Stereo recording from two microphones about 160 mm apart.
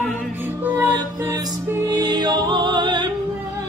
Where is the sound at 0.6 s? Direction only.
15° right (ahead or behind).